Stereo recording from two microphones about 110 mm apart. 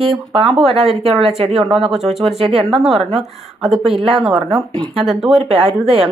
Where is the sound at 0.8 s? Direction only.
Centre (ahead or behind).